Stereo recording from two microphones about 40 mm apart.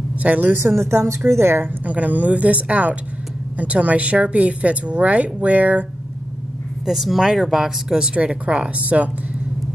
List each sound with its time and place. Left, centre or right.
0.2 s a woman's voice: right
0.5 s speech: right
1.9 s a woman's voice: right
6.9 s speech: centre; by 9.1 s right